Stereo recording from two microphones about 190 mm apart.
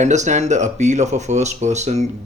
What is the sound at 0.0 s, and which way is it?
Speech, 40° right (ahead or behind).